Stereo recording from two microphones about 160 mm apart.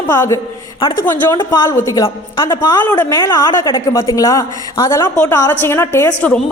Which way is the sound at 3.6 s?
30° left (ahead or behind).